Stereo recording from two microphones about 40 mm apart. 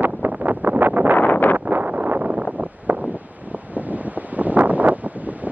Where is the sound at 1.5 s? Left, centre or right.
Right.